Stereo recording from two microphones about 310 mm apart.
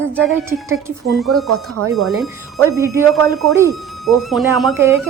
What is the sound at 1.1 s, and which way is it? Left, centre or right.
Speech, centre.